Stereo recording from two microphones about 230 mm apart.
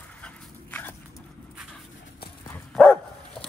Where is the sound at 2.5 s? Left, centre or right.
Centre.